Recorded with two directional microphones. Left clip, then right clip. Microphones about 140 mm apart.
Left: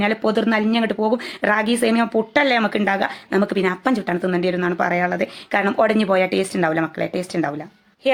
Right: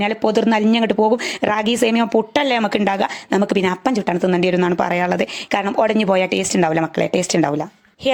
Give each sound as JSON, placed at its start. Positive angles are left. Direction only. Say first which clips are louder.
{"t": 0.0, "sound": "speech", "louder": "right 2 dB", "side_deg": -45}
{"t": 4.8, "sound": "speech", "louder": "right 2 dB", "side_deg": -70}
{"t": 8.0, "sound": "speech", "louder": "even", "side_deg": -80}